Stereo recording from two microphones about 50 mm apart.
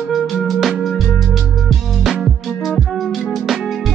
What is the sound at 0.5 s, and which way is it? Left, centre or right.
Music, centre.